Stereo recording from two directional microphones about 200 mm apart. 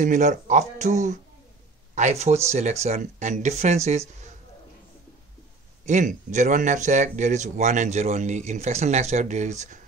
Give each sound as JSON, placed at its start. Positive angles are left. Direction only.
{"t": 0.0, "sound": "speech", "side_deg": -40}
{"t": 5.9, "sound": "speech", "side_deg": -40}